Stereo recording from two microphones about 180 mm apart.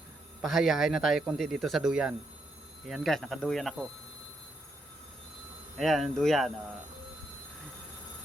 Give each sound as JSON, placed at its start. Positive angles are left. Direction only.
{"t": 0.4, "sound": "speech", "side_deg": 0}
{"t": 5.7, "sound": "speech", "side_deg": 0}